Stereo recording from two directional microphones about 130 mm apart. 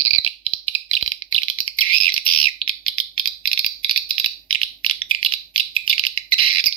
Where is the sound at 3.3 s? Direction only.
40° right (ahead or behind).